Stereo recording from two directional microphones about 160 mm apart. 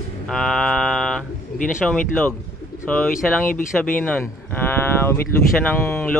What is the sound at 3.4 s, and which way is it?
Speech, 60° left (ahead or behind).